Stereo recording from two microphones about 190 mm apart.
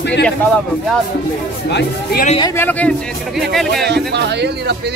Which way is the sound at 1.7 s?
55° left (ahead or behind).